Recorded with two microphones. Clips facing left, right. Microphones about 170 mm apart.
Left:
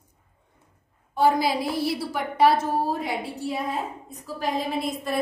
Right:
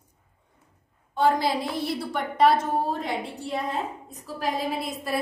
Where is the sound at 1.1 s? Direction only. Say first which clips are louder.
Left 1 dB; 10° left (ahead or behind).